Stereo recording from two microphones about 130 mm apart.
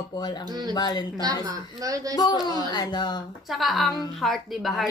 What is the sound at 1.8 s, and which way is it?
Speech, 25° right (ahead or behind).